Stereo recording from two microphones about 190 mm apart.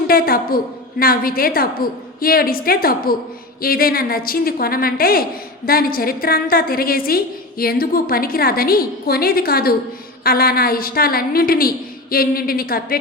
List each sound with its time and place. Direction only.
0.1 s a woman's voice: 50° left (ahead or behind)